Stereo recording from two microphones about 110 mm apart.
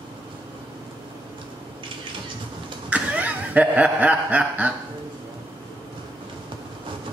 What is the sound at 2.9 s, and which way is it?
Snicker, 15° right (ahead or behind).